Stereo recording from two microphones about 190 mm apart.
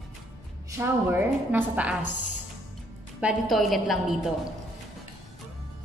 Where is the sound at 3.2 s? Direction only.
5° right (ahead or behind).